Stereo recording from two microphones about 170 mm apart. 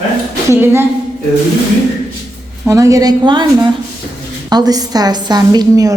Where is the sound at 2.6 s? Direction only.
20° right (ahead or behind).